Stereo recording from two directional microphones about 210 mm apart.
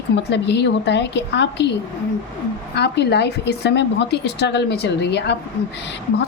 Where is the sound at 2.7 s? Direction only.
55° left (ahead or behind).